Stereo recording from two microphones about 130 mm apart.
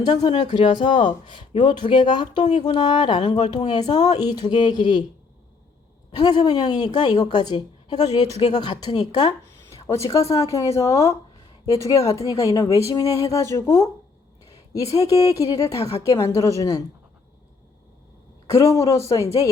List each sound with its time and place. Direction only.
0.0 s speech: 35° left (ahead or behind)
6.1 s a woman's voice: 30° left (ahead or behind)
9.7 s a woman's voice: 20° left (ahead or behind)
18.5 s a woman's voice: 25° left (ahead or behind)